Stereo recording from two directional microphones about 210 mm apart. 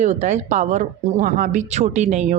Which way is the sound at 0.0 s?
35° right (ahead or behind).